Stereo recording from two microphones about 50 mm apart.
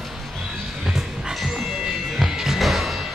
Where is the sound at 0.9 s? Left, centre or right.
Centre.